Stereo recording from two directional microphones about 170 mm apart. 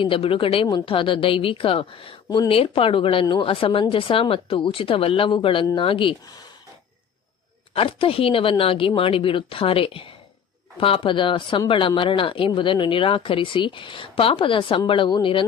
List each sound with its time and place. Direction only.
0.0 s a woman's voice: 35° left (ahead or behind)
7.7 s a woman's voice: 35° left (ahead or behind)